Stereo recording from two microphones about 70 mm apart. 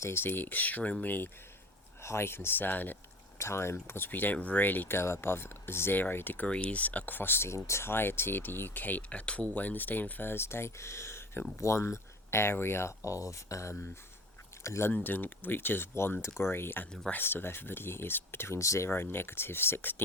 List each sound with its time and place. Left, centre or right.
0.0 s speech: left
2.0 s speech: left
3.3 s speech: left
14.8 s speech: left
18.9 s speech: left